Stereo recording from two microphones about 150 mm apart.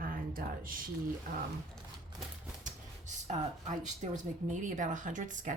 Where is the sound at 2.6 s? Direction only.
50° right (ahead or behind).